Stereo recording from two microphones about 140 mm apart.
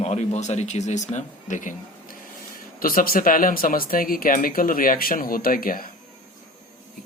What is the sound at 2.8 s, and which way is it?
Speech, 90° left.